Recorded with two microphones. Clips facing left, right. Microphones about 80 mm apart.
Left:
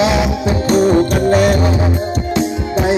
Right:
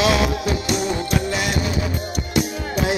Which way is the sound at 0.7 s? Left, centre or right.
Left.